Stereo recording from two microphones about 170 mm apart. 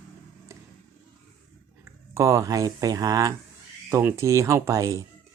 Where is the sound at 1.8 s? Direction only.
15° right (ahead or behind).